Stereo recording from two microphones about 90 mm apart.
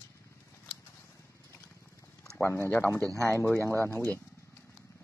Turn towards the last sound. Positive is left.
turn(degrees=20)  # may be behind; listen again after turning